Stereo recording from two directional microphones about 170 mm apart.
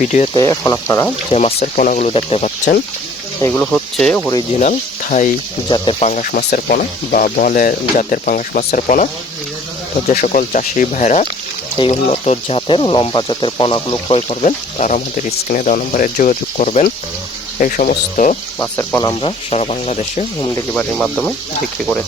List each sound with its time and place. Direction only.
0.0 s speech: 45° left (ahead or behind)
0.3 s speech: 20° left (ahead or behind)
1.3 s speech: 35° left (ahead or behind)
3.4 s speech: 10° left (ahead or behind)
4.6 s speech: 50° left (ahead or behind)
5.6 s speech: 25° left (ahead or behind); by 9.0 s 50° left (ahead or behind)
10.1 s speech: 50° left (ahead or behind); by 14.2 s 30° left (ahead or behind)
14.2 s speech: 40° left (ahead or behind)
18.6 s speech: 15° left (ahead or behind)
19.2 s speech: 35° left (ahead or behind)
20.4 s speech: 20° left (ahead or behind)
20.7 s speech: 10° left (ahead or behind)